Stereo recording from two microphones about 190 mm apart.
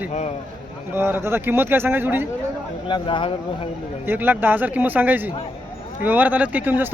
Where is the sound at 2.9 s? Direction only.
25° left (ahead or behind).